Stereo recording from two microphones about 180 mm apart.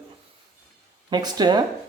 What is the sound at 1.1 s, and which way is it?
Speech, 20° right (ahead or behind).